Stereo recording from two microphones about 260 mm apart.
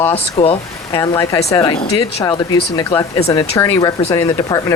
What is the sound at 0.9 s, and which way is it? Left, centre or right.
Speech, centre.